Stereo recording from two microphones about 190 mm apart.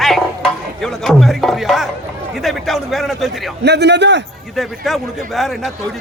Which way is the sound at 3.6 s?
60° right (ahead or behind).